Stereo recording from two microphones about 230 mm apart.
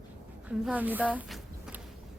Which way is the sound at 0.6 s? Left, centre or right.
Centre.